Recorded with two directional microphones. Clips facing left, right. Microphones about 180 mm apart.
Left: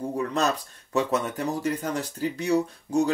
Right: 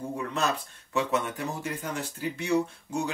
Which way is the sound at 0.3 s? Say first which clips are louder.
Left 4 dB; 40° left (ahead or behind).